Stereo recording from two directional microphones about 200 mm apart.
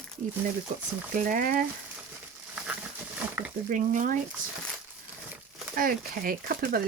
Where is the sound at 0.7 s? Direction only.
40° right (ahead or behind).